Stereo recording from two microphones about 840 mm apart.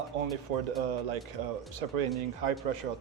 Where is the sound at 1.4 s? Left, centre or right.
Right.